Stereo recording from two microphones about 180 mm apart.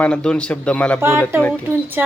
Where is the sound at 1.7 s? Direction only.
10° right (ahead or behind).